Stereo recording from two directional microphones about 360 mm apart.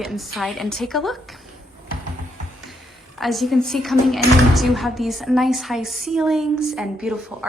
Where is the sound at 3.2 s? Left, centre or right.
Centre.